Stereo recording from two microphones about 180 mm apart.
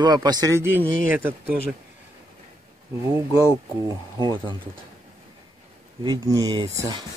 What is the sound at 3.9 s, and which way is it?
Speech, 25° right (ahead or behind).